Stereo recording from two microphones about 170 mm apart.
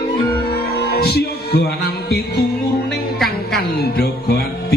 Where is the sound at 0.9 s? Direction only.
65° left (ahead or behind).